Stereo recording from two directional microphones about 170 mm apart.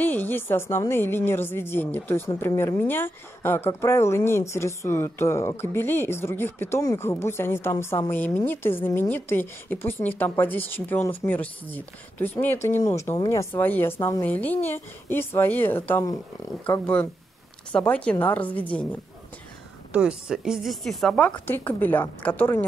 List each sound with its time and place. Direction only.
0.0 s speech: 10° left (ahead or behind)
19.9 s a woman's voice: 5° right (ahead or behind); by 22.7 s 10° left (ahead or behind)